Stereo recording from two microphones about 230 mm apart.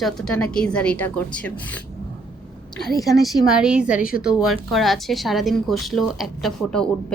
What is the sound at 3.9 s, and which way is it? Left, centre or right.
Speech, left.